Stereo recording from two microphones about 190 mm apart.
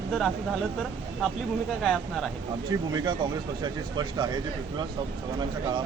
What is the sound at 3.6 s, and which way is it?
Speech, 20° right (ahead or behind).